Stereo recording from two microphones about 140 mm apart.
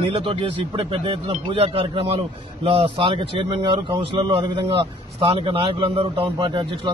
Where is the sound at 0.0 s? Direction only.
40° right (ahead or behind).